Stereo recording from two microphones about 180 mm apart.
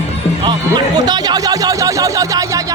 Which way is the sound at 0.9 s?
20° right (ahead or behind).